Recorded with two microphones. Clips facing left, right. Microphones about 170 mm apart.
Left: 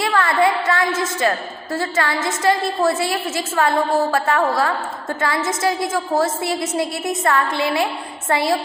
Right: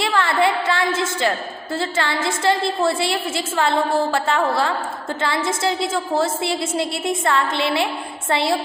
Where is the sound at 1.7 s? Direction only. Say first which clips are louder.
Left 1 dB; 25° right (ahead or behind).